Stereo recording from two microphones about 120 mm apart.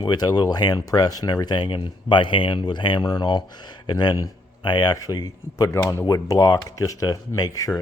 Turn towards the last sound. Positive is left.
turn(degrees=30)  # may be behind; listen again after turning